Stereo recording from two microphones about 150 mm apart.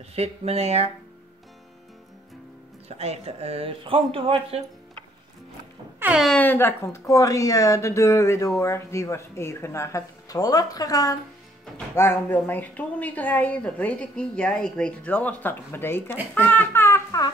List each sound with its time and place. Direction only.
0.1 s speech: 45° right (ahead or behind)
2.9 s speech: 45° right (ahead or behind)
5.9 s music: 10° right (ahead or behind)
6.2 s speech: 10° left (ahead or behind)